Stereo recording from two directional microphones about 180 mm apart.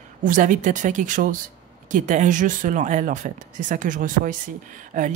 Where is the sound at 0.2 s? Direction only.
45° right (ahead or behind).